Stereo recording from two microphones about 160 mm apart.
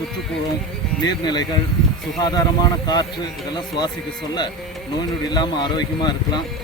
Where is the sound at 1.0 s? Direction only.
25° left (ahead or behind).